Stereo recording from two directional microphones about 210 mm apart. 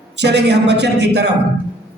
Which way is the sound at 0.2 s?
55° right (ahead or behind).